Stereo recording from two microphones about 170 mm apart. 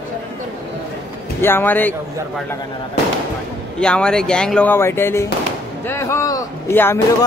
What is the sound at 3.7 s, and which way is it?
A man's voice, 5° left (ahead or behind).